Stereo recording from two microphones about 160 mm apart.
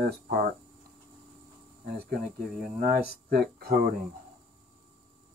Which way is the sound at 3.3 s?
75° right (ahead or behind).